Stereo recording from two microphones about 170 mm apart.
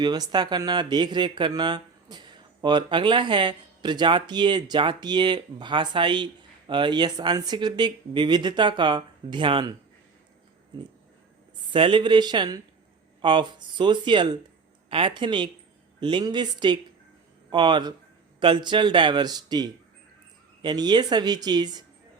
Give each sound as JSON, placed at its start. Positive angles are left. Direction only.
{"t": 0.0, "sound": "speech", "side_deg": -25}
{"t": 11.7, "sound": "speech", "side_deg": -30}